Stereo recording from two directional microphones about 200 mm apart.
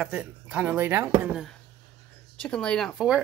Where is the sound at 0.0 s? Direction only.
5° right (ahead or behind).